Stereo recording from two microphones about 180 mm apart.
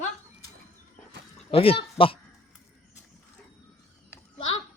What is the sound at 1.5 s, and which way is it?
Speech, 30° left (ahead or behind).